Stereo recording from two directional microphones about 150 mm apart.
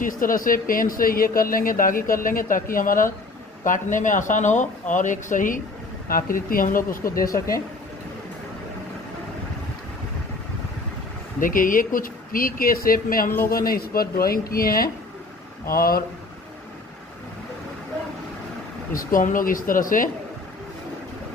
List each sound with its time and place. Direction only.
0.0 s speech: 65° left (ahead or behind)
7.0 s speech: 20° left (ahead or behind)
11.3 s speech: 65° left (ahead or behind)
18.9 s speech: 65° left (ahead or behind)